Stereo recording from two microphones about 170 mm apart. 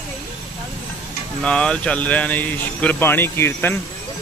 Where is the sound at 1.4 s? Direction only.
5° left (ahead or behind).